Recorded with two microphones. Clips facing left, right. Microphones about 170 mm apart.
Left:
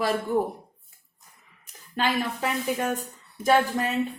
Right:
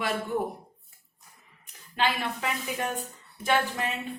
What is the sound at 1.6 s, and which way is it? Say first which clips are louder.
Speech: left 1 dB; 40° left (ahead or behind).